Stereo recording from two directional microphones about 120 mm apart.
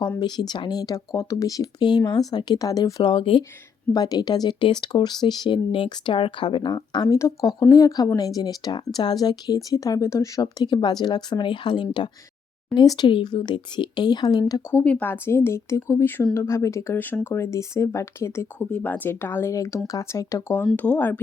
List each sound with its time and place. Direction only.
0.2 s speech: 35° left (ahead or behind)
3.0 s speech: 45° left (ahead or behind)
3.9 s speech: 30° left (ahead or behind)
14.7 s speech: 15° left (ahead or behind)